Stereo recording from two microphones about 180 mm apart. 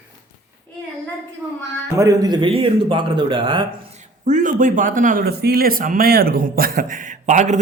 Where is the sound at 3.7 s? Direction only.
45° right (ahead or behind).